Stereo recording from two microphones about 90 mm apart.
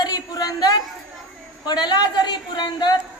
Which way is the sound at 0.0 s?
45° left (ahead or behind).